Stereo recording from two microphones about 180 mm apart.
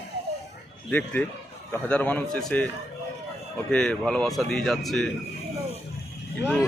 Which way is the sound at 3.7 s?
5° left (ahead or behind).